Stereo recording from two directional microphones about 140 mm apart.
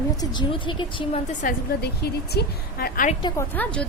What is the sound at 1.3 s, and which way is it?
Speech, 60° left (ahead or behind).